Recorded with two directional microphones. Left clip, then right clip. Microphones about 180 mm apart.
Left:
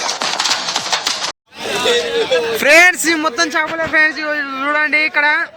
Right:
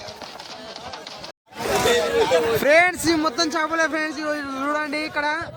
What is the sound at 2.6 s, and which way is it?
Speech, centre (ahead or behind).